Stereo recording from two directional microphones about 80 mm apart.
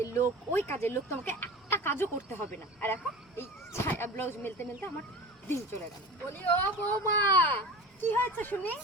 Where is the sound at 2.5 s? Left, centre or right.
Left.